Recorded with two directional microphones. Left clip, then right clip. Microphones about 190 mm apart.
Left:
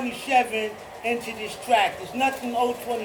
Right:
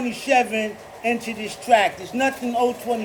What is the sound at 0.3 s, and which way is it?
Speech, 55° right (ahead or behind).